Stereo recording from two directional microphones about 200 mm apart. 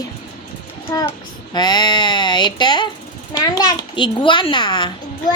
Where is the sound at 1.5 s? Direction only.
20° left (ahead or behind).